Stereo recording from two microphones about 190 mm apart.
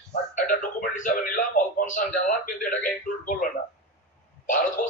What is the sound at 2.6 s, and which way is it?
A man's voice, 45° left (ahead or behind).